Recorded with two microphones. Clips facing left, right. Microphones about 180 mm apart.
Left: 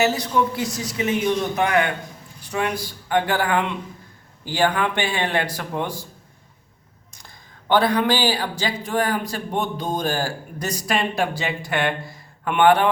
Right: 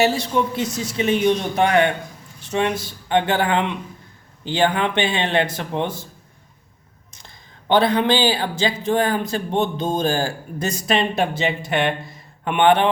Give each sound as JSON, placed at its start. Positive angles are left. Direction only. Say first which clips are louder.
{"t": 0.0, "sound": "a man's voice", "louder": "right 1 dB", "side_deg": -30}
{"t": 7.7, "sound": "a man's voice", "louder": "right 2 dB", "side_deg": -25}